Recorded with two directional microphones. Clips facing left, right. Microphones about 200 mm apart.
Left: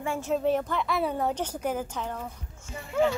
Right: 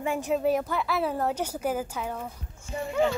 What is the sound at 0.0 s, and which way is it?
A woman's voice, 15° right (ahead or behind).